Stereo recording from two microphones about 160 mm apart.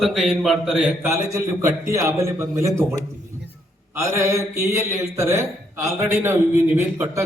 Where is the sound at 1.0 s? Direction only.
20° right (ahead or behind).